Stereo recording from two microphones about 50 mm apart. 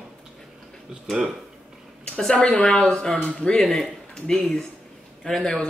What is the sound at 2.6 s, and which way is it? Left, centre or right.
Speech, centre.